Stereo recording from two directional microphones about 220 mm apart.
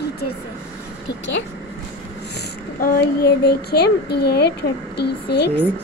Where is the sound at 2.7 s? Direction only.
45° left (ahead or behind).